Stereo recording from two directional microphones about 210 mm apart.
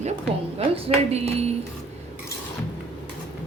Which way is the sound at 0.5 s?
30° right (ahead or behind).